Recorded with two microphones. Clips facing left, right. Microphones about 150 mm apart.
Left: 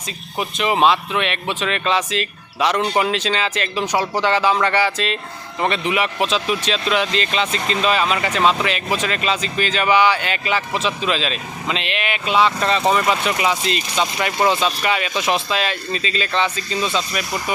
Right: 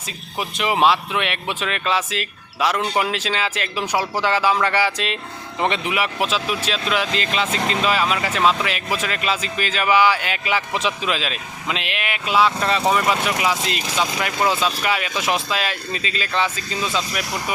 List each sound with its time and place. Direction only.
0.3 s speech: 5° right (ahead or behind)